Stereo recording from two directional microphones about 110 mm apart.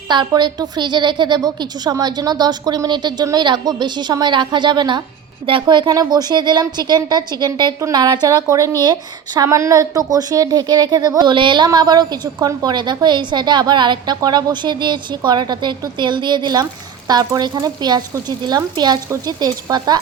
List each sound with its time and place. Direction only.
0.1 s a woman's voice: 45° right (ahead or behind)